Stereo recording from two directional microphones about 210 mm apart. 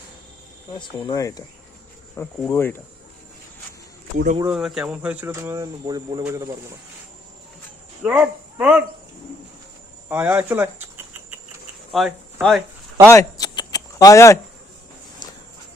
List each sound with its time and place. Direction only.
0.8 s speech: 20° left (ahead or behind)
4.4 s speech: centre (ahead or behind)
8.0 s speech: 5° right (ahead or behind)
10.1 s speech: 10° right (ahead or behind)
11.9 s a sound: centre (ahead or behind)
13.1 s a sound: 15° left (ahead or behind)